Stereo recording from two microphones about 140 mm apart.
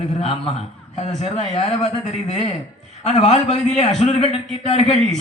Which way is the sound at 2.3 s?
50° left (ahead or behind).